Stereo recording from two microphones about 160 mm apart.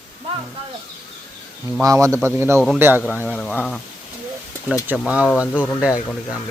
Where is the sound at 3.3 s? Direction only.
10° left (ahead or behind).